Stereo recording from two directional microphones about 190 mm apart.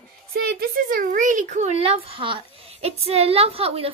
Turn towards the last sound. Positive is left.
turn(degrees=-30)  # may be behind; listen again after turning